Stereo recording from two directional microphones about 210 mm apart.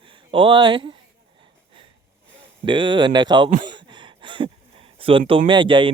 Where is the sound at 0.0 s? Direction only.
25° right (ahead or behind).